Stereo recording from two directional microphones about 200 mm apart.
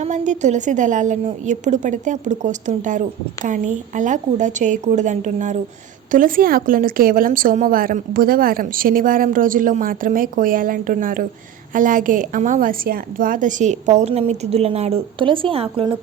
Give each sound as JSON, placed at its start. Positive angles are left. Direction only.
{"t": 0.0, "sound": "a woman's voice", "side_deg": -35}